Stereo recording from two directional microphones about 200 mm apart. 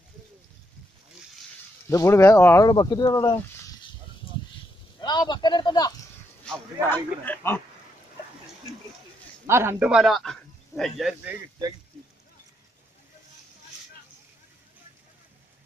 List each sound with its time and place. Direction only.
1.9 s speech: 15° left (ahead or behind)
5.0 s a man's voice: 20° left (ahead or behind)
6.4 s speech: 5° left (ahead or behind)
9.5 s a man's voice: 10° right (ahead or behind)